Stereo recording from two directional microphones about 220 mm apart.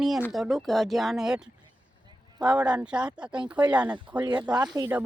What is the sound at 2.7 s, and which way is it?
Speech, 5° right (ahead or behind).